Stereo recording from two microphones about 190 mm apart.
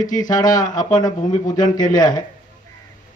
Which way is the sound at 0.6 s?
20° left (ahead or behind).